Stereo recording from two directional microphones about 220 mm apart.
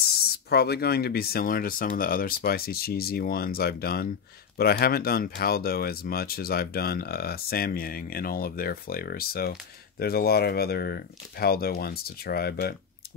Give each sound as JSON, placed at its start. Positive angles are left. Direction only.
{"t": 0.5, "sound": "speech", "side_deg": 45}